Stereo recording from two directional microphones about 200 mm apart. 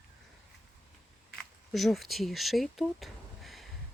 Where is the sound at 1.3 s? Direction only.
Centre (ahead or behind).